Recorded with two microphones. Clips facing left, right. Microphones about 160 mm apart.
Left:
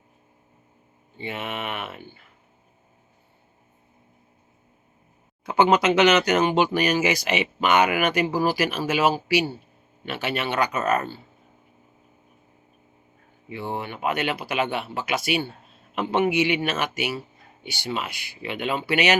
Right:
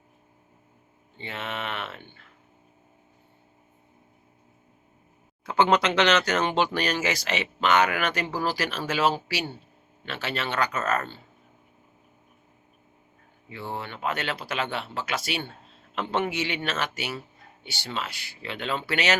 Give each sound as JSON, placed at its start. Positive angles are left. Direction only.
{"t": 1.2, "sound": "speech", "side_deg": 15}
{"t": 5.4, "sound": "a sound", "side_deg": 15}
{"t": 5.6, "sound": "speech", "side_deg": 5}
{"t": 13.5, "sound": "speech", "side_deg": 15}